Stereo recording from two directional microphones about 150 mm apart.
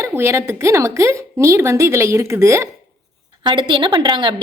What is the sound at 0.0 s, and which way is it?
A woman's voice, 15° right (ahead or behind).